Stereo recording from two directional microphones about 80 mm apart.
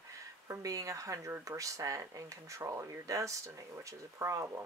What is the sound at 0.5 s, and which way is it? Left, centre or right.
Speech, right.